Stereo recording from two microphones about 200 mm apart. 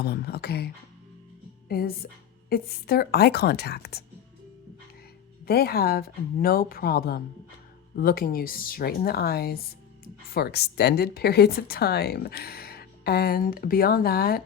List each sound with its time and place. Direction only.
0.0 s a woman's voice: 55° left (ahead or behind)
5.5 s speech: 50° left (ahead or behind)